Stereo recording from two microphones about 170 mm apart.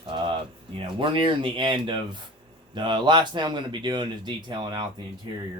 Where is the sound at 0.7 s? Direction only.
30° right (ahead or behind).